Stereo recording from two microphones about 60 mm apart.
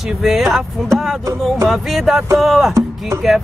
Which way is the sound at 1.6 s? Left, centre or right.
Centre.